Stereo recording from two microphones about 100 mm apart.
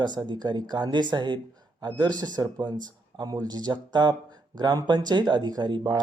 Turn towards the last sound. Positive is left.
turn(degrees=-45)  # may be behind; listen again after turning